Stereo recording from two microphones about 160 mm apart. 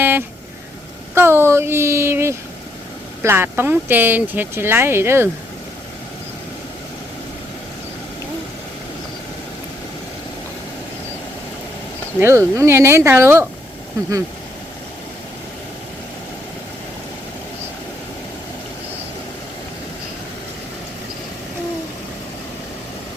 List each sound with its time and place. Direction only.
0.0 s vehicle: 15° right (ahead or behind)
1.1 s speech: 15° right (ahead or behind)
12.2 s speech: 15° right (ahead or behind)